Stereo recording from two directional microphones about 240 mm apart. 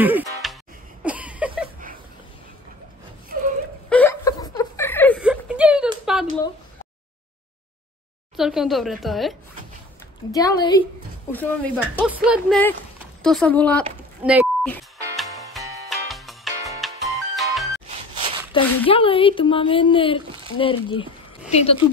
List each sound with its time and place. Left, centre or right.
0.0 s music: centre
1.0 s a sound: centre
3.9 s a sound: centre
5.2 s whimper: centre
6.1 s a sound: centre
8.4 s speech: centre
10.3 s speech: centre
12.0 s speech: centre
14.2 s beep: centre
15.1 s music: centre
18.5 s a sound: left
18.9 s a woman's voice: left